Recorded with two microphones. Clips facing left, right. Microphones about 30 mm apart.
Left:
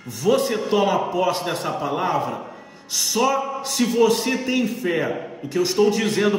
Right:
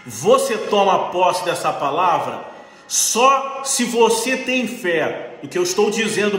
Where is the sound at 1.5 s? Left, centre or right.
Right.